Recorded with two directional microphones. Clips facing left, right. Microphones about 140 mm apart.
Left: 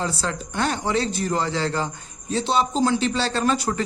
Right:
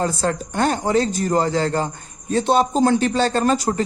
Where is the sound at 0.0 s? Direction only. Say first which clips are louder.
Right 5 dB; 45° right (ahead or behind).